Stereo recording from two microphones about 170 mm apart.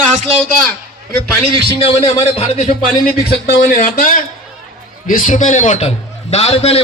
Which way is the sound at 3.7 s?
50° left (ahead or behind).